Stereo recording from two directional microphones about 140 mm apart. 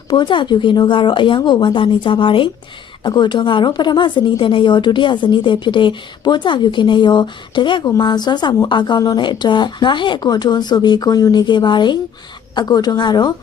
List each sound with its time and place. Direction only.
0.1 s a woman's voice: 35° left (ahead or behind)